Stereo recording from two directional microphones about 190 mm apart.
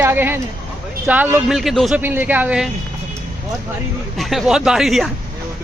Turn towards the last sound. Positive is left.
turn(degrees=0)  # may be behind; listen again after turning